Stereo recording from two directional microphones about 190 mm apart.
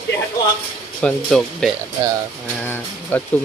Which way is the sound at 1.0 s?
Centre (ahead or behind).